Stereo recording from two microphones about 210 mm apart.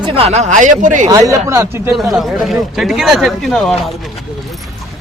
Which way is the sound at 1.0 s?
15° right (ahead or behind).